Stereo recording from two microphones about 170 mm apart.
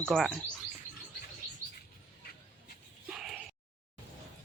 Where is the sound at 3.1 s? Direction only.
5° right (ahead or behind).